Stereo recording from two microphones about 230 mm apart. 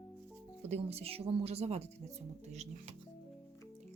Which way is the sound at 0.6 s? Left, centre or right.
Right.